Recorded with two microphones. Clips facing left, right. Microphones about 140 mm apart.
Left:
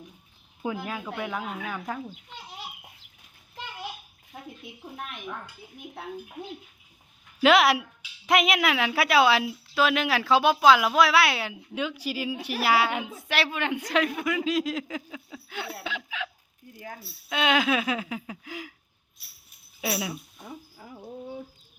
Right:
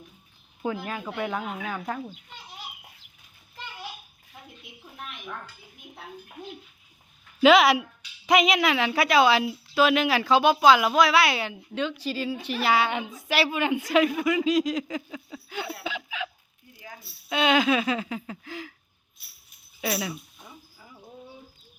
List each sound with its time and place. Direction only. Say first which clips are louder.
0.6 s speech: right 1 dB; 10° left (ahead or behind)
1.0 s a woman's voice: right 2 dB; centre (ahead or behind)
7.4 s a woman's voice: right 2 dB; centre (ahead or behind)
15.8 s laughter: right 1 dB; centre (ahead or behind)
16.7 s speech: left 4 dB; 50° left (ahead or behind)
17.0 s a woman's voice: right 3 dB; centre (ahead or behind)
19.8 s a woman's voice: right 1 dB; 5° left (ahead or behind)
20.7 s a sound: left 6 dB; 50° left (ahead or behind)